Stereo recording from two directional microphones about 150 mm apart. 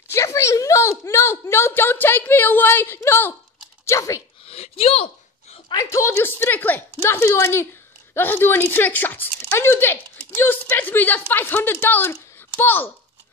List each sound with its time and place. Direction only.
0.1 s a woman's voice: 20° left (ahead or behind)
4.5 s a sound: 40° left (ahead or behind)
5.7 s speech: 20° left (ahead or behind)